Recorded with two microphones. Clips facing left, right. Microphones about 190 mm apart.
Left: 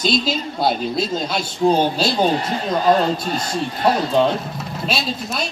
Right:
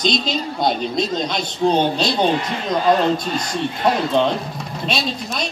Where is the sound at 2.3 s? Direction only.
40° left (ahead or behind).